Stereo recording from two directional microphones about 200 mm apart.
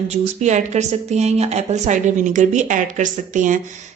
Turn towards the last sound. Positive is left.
turn(degrees=-40)  # may be behind; listen again after turning